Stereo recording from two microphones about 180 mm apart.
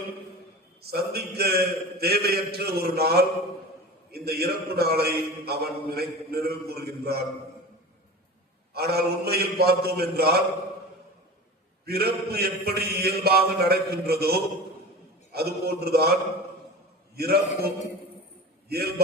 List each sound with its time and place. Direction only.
0.8 s a man's voice: 60° right (ahead or behind)
8.7 s a man's voice: 60° right (ahead or behind)
11.9 s a man's voice: 60° right (ahead or behind)
17.2 s a man's voice: 60° right (ahead or behind)
18.7 s a man's voice: 60° right (ahead or behind)